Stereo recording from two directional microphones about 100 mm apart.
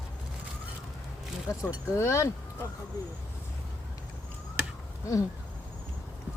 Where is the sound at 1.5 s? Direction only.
35° left (ahead or behind).